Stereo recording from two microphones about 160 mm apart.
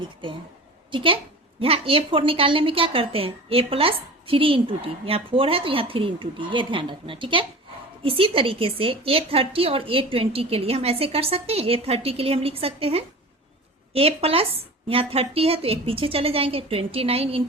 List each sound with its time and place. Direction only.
0.9 s a woman's voice: 35° right (ahead or behind)